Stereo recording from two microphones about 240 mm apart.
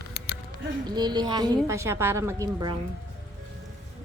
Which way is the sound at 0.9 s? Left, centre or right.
Centre.